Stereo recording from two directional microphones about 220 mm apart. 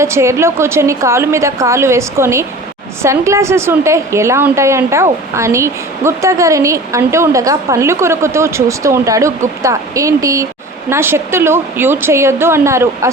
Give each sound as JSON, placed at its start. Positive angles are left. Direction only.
{"t": 0.0, "sound": "a woman's voice", "side_deg": -10}